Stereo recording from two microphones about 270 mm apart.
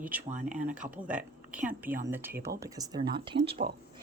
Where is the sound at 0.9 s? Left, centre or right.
Centre; by 3.7 s right.